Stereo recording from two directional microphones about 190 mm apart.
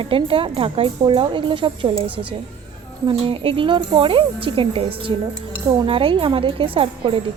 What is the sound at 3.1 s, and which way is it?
Speech, 25° right (ahead or behind).